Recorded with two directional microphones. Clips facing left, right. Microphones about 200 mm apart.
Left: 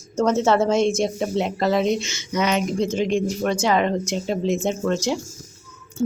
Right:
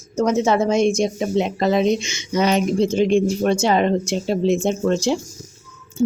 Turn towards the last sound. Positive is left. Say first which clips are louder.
# right 4 dB
turn(degrees=-10)  # may be behind; listen again after turning